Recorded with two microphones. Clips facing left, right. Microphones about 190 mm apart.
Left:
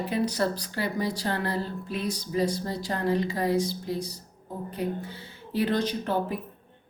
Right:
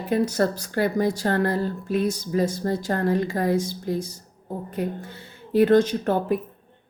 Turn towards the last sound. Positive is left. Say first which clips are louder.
# right 4 dB
turn(degrees=-50)  # may be behind; listen again after turning